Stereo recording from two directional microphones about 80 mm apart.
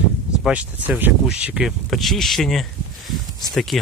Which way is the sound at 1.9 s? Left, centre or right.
Centre.